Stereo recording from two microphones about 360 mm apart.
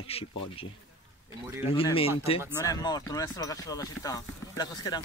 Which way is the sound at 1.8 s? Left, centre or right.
Centre.